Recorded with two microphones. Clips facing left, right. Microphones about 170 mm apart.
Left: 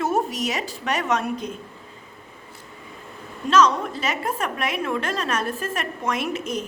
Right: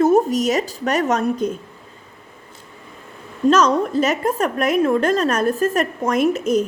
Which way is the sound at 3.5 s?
40° right (ahead or behind).